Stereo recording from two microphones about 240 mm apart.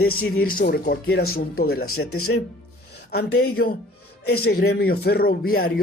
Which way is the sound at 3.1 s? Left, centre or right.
Left.